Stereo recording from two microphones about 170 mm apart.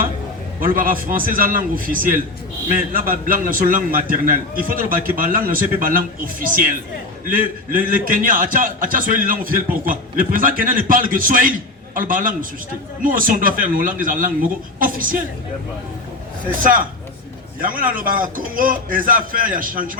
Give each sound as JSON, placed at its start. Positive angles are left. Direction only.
{"t": 0.6, "sound": "a man's voice", "side_deg": -55}
{"t": 17.6, "sound": "a man's voice", "side_deg": -55}